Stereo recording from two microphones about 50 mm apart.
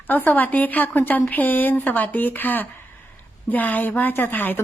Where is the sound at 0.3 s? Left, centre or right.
Left.